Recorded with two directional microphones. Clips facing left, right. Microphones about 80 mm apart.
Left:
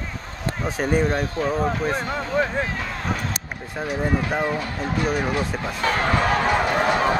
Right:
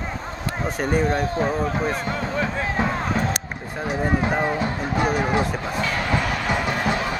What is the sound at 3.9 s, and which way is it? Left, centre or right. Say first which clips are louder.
Speech: right 1 dB; right.